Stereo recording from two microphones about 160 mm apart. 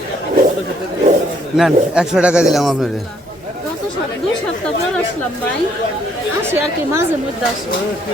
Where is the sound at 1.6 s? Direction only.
5° right (ahead or behind).